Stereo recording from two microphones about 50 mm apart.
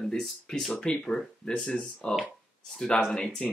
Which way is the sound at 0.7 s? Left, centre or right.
Centre.